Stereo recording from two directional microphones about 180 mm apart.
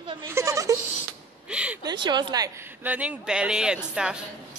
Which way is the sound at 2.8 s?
10° right (ahead or behind).